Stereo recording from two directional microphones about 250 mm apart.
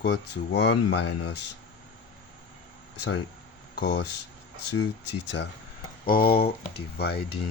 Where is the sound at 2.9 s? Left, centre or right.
Left.